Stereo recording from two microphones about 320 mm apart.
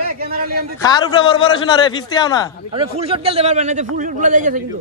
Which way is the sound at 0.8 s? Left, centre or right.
Centre.